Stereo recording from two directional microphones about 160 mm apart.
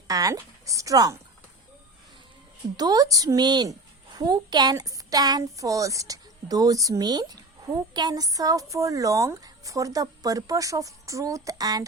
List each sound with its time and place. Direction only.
0.1 s a woman's voice: 20° right (ahead or behind)
2.7 s a woman's voice: 25° right (ahead or behind)